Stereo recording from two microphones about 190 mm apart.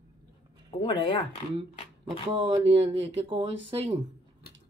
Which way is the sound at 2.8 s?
25° right (ahead or behind).